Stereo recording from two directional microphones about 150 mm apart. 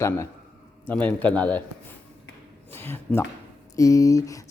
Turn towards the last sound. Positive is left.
turn(degrees=20)  # may be behind; listen again after turning